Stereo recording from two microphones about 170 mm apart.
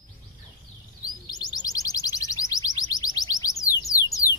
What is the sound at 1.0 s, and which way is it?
Chirp, 25° left (ahead or behind).